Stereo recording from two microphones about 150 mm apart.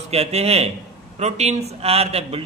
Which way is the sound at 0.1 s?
45° right (ahead or behind).